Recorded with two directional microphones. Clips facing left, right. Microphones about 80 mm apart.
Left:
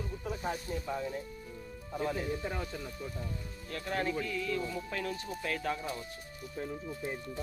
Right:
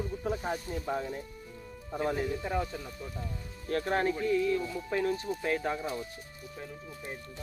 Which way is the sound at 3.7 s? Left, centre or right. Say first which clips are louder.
Right 5 dB; right.